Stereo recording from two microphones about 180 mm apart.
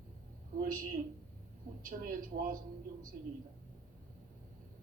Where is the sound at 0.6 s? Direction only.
50° right (ahead or behind).